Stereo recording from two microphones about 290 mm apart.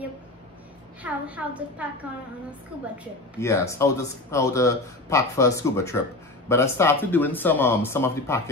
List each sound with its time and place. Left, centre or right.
1.0 s a woman's voice: centre
3.3 s a man's voice: centre